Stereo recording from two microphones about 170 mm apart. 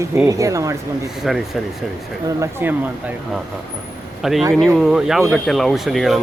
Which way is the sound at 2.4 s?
10° right (ahead or behind).